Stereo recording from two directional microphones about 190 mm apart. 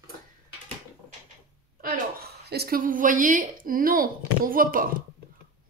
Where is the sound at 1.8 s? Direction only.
50° right (ahead or behind).